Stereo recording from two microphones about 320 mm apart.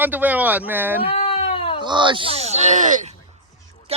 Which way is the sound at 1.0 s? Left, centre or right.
Centre.